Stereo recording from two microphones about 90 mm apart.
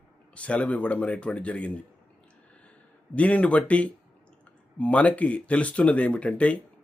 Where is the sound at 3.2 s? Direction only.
15° left (ahead or behind).